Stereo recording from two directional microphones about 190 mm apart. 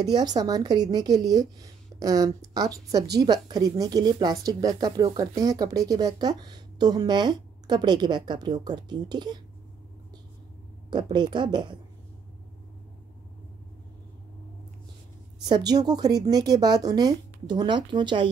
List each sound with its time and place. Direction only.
0.0 s speech: 20° right (ahead or behind)
10.9 s speech: 25° right (ahead or behind)
15.4 s speech: 20° right (ahead or behind)